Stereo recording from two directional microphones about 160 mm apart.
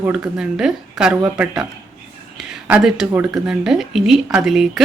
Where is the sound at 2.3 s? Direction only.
5° right (ahead or behind).